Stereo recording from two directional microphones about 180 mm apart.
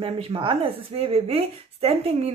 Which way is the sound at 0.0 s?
30° right (ahead or behind).